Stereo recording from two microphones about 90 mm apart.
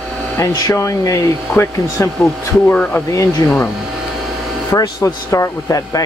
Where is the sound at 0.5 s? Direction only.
35° left (ahead or behind).